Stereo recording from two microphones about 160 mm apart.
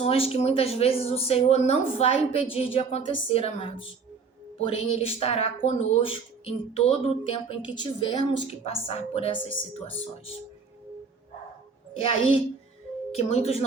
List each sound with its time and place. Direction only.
0.0 s a woman's voice: 40° left (ahead or behind)
12.0 s a woman's voice: 35° left (ahead or behind)